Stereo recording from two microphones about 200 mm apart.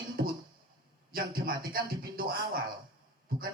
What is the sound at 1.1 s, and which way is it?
Music, 45° right (ahead or behind).